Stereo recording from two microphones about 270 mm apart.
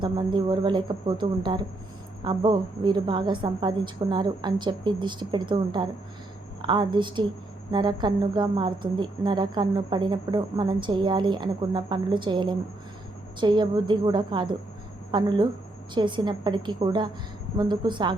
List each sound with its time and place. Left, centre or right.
0.0 s a woman's voice: centre